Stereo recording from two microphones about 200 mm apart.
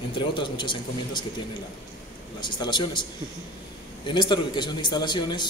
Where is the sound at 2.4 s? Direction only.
20° left (ahead or behind).